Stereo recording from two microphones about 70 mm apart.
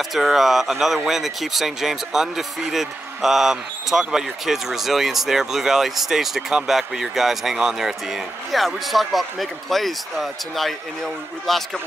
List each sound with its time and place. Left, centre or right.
0.1 s speech: centre